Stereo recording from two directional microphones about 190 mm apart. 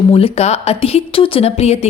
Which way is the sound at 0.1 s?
30° left (ahead or behind).